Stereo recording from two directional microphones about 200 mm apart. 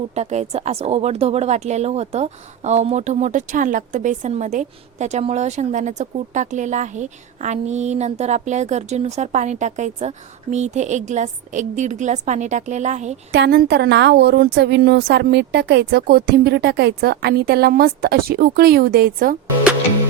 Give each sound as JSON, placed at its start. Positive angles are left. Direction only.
{"t": 0.1, "sound": "speech", "side_deg": -35}
{"t": 13.3, "sound": "a woman's voice", "side_deg": -55}